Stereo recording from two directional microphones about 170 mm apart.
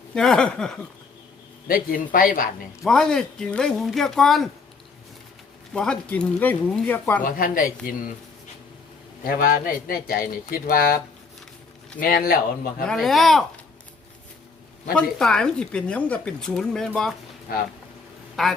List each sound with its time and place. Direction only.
0.1 s speech: 5° left (ahead or behind)
1.6 s a man's voice: 55° left (ahead or behind)
2.8 s speech: 5° left (ahead or behind)
5.7 s speech: 5° left (ahead or behind)
7.2 s a man's voice: 55° left (ahead or behind)
9.2 s a man's voice: 55° left (ahead or behind)
11.9 s a man's voice: 60° left (ahead or behind)
12.9 s speech: centre (ahead or behind)
14.9 s speech: 5° left (ahead or behind)
17.5 s a man's voice: 60° left (ahead or behind)
18.4 s speech: centre (ahead or behind)